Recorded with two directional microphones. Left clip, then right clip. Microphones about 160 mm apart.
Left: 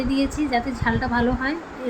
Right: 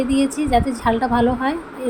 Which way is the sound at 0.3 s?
20° right (ahead or behind).